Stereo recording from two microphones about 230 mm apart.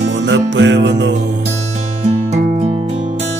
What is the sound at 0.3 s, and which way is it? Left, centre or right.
Music, right.